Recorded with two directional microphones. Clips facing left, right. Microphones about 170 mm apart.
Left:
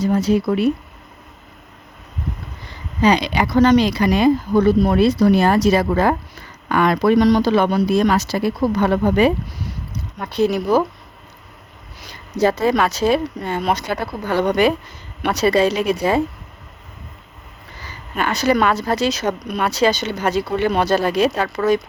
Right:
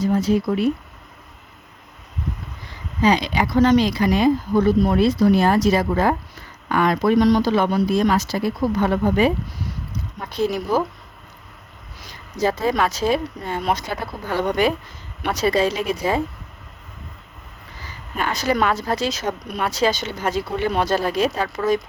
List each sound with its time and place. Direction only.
0.0 s speech: 75° left (ahead or behind)
3.0 s speech: 70° left (ahead or behind)
12.4 s speech: 70° left (ahead or behind)
18.2 s speech: 70° left (ahead or behind)